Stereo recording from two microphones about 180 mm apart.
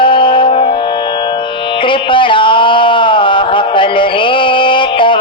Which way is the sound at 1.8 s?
30° left (ahead or behind).